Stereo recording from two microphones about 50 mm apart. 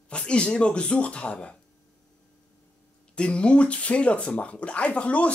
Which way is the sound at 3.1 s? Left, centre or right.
Left.